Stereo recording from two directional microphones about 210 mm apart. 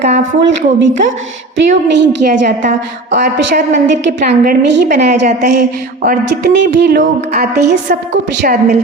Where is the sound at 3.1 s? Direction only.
50° right (ahead or behind).